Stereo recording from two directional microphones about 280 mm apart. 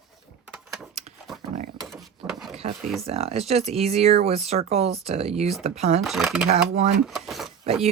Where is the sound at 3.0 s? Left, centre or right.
Right.